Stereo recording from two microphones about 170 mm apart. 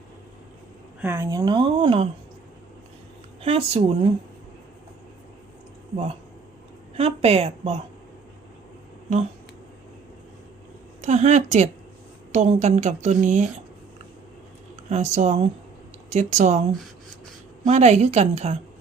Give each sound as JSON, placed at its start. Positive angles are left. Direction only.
{"t": 1.0, "sound": "speech", "side_deg": -15}
{"t": 3.4, "sound": "a woman's voice", "side_deg": -35}
{"t": 6.9, "sound": "a woman's voice", "side_deg": -35}
{"t": 11.0, "sound": "a woman's voice", "side_deg": -40}
{"t": 14.8, "sound": "a woman's voice", "side_deg": -45}
{"t": 17.7, "sound": "a woman's voice", "side_deg": -40}